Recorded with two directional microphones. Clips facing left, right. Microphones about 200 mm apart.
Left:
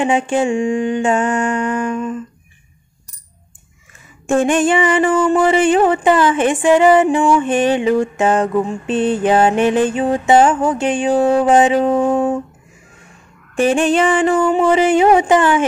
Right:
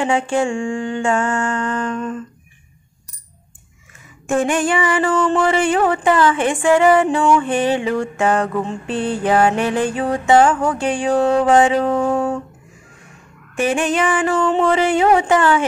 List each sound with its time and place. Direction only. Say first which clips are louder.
0.0 s a sound: left 2 dB; 20° left (ahead or behind)
4.3 s mantra: left 4 dB; 25° left (ahead or behind)
13.6 s mantra: left 4 dB; 30° left (ahead or behind)
14.4 s mantra: left 3 dB; 10° left (ahead or behind)